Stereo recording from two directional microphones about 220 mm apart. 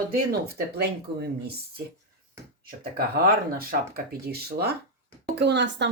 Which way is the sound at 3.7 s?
45° right (ahead or behind).